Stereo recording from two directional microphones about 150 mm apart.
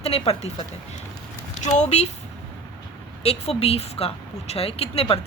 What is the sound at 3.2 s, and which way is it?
Speech, 40° left (ahead or behind).